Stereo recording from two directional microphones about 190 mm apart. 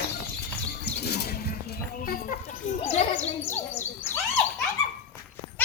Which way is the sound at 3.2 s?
10° left (ahead or behind).